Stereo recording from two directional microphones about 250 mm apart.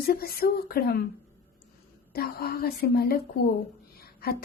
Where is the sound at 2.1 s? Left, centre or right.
Left.